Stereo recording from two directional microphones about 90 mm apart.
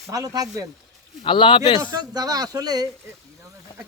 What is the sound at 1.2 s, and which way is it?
Speech, 70° left (ahead or behind).